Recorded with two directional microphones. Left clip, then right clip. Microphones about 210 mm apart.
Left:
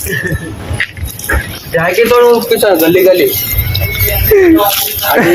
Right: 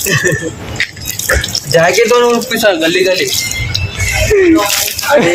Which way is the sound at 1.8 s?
50° right (ahead or behind).